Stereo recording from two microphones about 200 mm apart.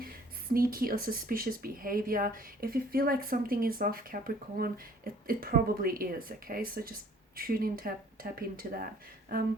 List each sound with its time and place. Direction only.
0.0 s speech: 45° right (ahead or behind)